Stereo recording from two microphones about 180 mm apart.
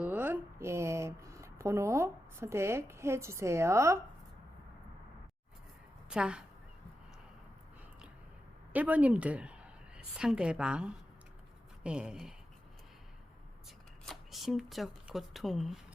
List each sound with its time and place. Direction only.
0.0 s speech: 10° right (ahead or behind)
6.1 s speech: 5° right (ahead or behind)
8.7 s a woman's voice: 10° right (ahead or behind)
13.7 s speech: centre (ahead or behind)